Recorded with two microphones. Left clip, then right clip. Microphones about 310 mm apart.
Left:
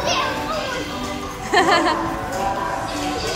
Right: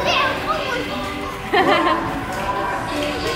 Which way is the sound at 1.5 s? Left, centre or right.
Centre.